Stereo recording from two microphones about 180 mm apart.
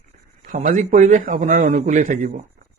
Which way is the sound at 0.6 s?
45° right (ahead or behind).